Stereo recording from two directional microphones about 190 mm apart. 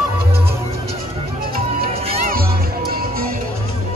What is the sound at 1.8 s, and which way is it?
Music, 30° right (ahead or behind).